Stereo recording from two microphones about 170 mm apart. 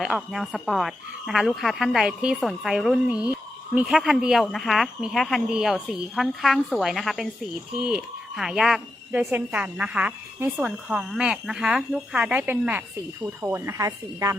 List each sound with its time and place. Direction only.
0.0 s a woman's voice: 5° right (ahead or behind); by 14.3 s 20° right (ahead or behind)